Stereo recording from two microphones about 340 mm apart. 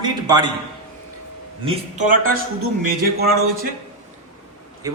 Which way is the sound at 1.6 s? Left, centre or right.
Centre.